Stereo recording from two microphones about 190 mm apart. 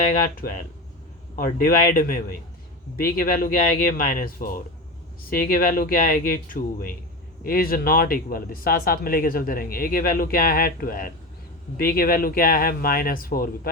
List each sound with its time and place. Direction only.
0.4 s speech: 50° left (ahead or behind)